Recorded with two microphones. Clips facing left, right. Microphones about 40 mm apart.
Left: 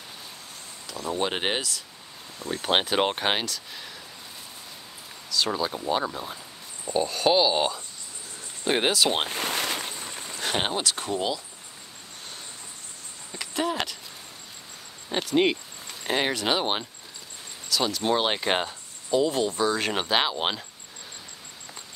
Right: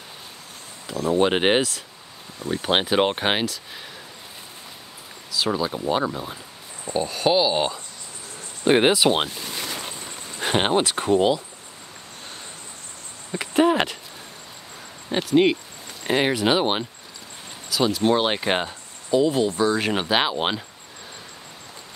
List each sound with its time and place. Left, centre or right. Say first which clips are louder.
1.1 s speech: right 8 dB; right
2.6 s speech: right 3 dB; centre
5.3 s speech: right 3 dB; centre
8.6 s speech: right 6 dB; centre
9.3 s a sound: left 4 dB; left
9.9 s a sound: right 1 dB; centre
10.3 s speech: right 7 dB; right
13.3 s a sound: right 9 dB; right
15.0 s speech: right 4 dB; centre